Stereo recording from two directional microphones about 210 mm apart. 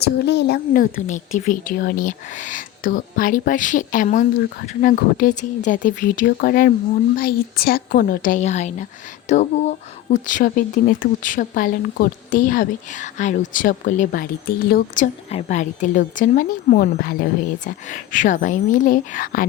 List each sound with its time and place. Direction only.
0.0 s speech: 55° left (ahead or behind)